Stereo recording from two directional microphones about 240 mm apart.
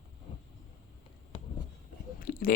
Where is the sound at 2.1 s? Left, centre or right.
Left.